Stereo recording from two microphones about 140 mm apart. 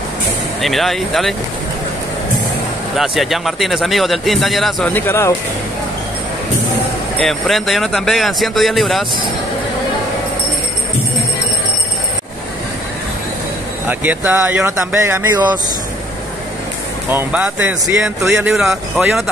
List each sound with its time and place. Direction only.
0.6 s speech: centre (ahead or behind)
3.0 s speech: centre (ahead or behind)
4.8 s speech: 15° left (ahead or behind)
7.2 s speech: centre (ahead or behind)
13.8 s speech: 10° right (ahead or behind)
17.1 s speech: 10° right (ahead or behind)